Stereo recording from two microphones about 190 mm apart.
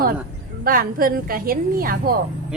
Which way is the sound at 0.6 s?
50° right (ahead or behind).